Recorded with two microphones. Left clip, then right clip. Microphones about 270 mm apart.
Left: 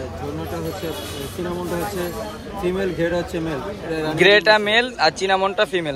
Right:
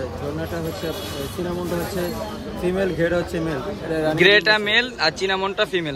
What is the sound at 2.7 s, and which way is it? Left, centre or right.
Speech, centre.